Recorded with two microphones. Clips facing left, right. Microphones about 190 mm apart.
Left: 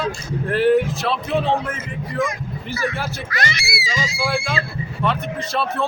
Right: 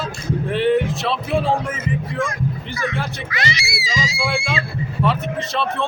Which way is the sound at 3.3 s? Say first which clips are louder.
Right 1 dB; 50° left (ahead or behind).